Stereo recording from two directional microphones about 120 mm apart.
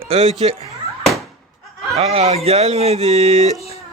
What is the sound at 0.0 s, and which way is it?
Speech, 55° right (ahead or behind).